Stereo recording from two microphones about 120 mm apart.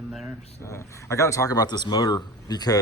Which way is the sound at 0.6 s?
25° left (ahead or behind).